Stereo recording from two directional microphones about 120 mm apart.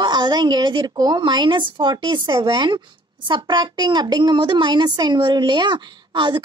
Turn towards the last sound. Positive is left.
turn(degrees=-40)  # may be behind; listen again after turning